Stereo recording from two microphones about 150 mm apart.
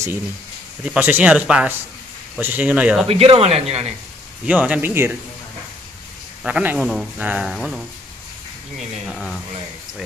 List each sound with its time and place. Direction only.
0.8 s speech: 10° right (ahead or behind)
3.1 s speech: 40° right (ahead or behind)
4.5 s speech: 10° right (ahead or behind)
6.4 s speech: 10° right (ahead or behind)
9.1 s speech: 5° right (ahead or behind)